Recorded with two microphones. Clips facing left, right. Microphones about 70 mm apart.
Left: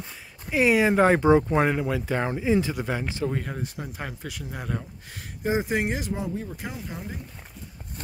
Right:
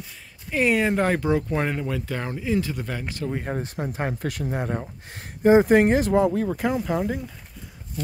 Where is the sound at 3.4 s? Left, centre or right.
Right.